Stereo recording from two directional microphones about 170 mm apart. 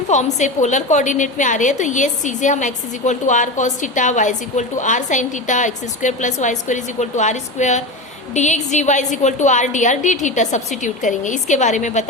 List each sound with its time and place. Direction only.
0.1 s a woman's voice: 45° left (ahead or behind)